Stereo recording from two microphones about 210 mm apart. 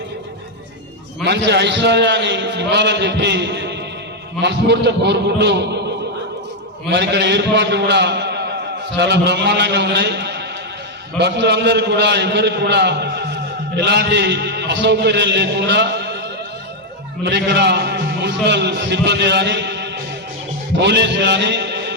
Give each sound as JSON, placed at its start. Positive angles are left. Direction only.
{"t": 1.2, "sound": "a man's voice", "side_deg": -55}
{"t": 6.9, "sound": "a man's voice", "side_deg": -55}
{"t": 17.2, "sound": "a man's voice", "side_deg": -55}